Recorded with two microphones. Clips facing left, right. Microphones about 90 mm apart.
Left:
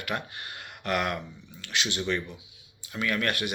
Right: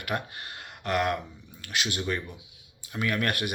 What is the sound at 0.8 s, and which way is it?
Speech, 35° right (ahead or behind).